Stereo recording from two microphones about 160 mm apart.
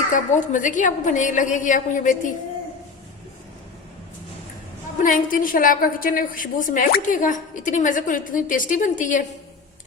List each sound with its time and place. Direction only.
0.1 s a woman's voice: 55° left (ahead or behind)
5.0 s a woman's voice: 60° left (ahead or behind)